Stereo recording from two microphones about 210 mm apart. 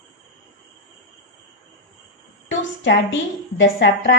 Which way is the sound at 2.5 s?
65° left (ahead or behind).